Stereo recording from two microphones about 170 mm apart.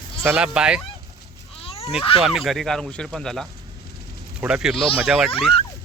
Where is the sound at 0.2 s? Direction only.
5° right (ahead or behind).